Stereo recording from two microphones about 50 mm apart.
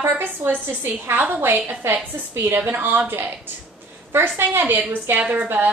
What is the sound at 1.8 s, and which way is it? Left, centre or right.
Speech, right.